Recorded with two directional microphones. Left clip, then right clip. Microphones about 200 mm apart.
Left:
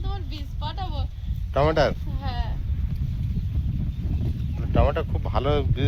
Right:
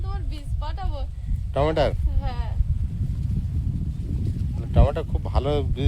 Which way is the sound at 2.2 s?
45° right (ahead or behind).